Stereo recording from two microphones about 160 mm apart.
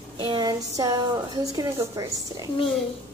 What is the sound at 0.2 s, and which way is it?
A woman's voice, 30° right (ahead or behind).